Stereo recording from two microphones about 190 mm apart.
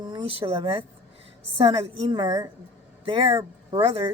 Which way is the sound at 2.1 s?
20° right (ahead or behind).